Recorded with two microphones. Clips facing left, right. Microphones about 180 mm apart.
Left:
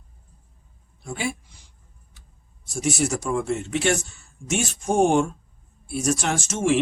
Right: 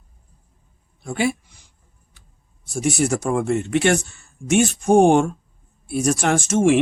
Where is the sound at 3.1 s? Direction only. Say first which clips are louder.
Right 4 dB; 55° right (ahead or behind).